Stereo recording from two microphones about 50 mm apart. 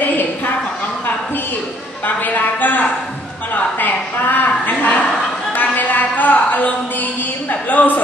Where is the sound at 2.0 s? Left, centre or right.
Left.